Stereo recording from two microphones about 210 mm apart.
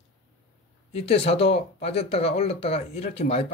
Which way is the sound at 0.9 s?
30° left (ahead or behind).